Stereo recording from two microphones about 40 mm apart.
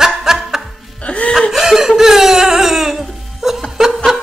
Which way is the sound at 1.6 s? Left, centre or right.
Centre.